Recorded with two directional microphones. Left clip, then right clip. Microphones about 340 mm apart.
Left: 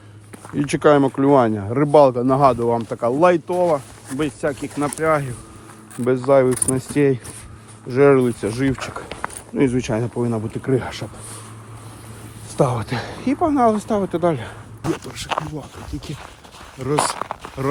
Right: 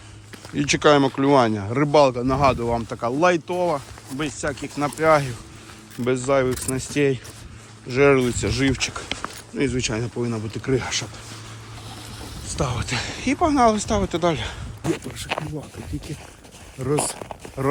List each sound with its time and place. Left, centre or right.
0.5 s speech: centre
12.5 s speech: centre
17.0 s speech: left